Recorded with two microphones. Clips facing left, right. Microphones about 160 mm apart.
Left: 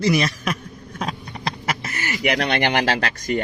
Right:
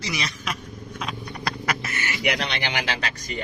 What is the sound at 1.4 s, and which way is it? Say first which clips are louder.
Speech: left 1 dB; 25° left (ahead or behind).